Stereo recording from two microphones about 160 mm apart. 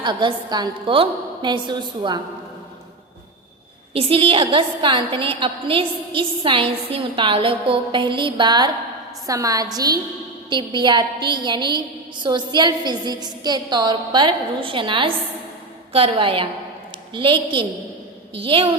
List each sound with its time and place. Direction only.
0.0 s a woman's voice: 30° right (ahead or behind)
3.9 s a woman's voice: 35° right (ahead or behind)